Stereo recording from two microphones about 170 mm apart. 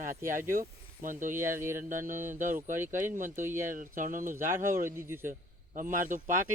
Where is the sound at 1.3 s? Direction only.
15° right (ahead or behind).